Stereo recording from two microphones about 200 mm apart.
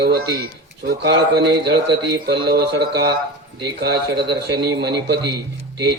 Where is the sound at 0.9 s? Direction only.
55° right (ahead or behind).